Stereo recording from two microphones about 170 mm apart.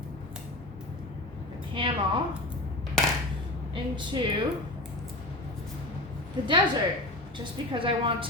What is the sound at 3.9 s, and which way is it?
Speech, 30° right (ahead or behind).